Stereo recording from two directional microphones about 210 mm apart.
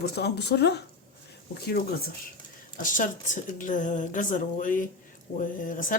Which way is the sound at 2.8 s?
40° left (ahead or behind).